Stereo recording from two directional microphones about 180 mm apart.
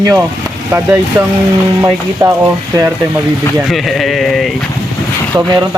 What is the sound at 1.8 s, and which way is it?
Speech, 20° right (ahead or behind).